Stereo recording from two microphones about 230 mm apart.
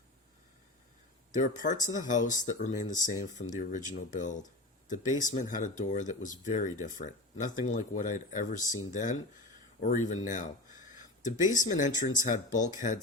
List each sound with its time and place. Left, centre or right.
1.3 s speech: left